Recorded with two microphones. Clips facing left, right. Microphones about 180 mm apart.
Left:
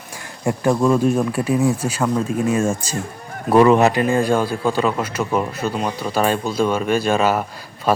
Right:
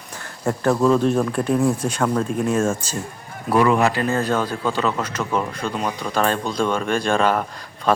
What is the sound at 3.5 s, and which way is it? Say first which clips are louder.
A man's voice: left 4 dB; 25° left (ahead or behind).